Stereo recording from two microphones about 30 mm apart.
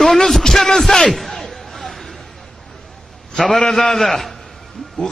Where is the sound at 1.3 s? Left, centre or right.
Centre.